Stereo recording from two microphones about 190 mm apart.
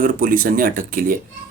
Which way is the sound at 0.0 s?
45° right (ahead or behind).